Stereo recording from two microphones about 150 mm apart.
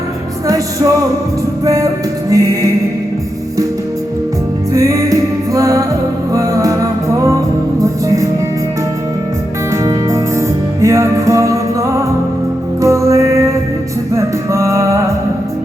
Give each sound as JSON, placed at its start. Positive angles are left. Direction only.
{"t": 0.4, "sound": "music", "side_deg": -20}
{"t": 4.7, "sound": "music", "side_deg": -20}
{"t": 9.8, "sound": "music", "side_deg": -20}